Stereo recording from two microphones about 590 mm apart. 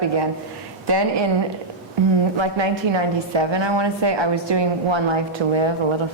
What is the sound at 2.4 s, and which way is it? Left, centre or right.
A woman's voice, right.